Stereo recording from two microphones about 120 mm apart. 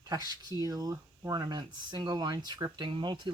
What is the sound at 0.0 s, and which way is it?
Speech, 35° right (ahead or behind).